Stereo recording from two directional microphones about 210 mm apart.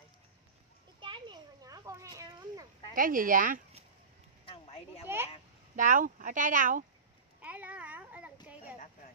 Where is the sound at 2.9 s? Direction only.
40° right (ahead or behind).